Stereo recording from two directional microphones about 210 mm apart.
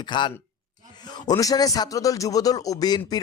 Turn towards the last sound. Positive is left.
turn(degrees=20)  # may be behind; listen again after turning